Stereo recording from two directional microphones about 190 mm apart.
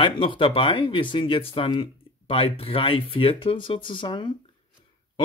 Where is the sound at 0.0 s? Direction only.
25° left (ahead or behind).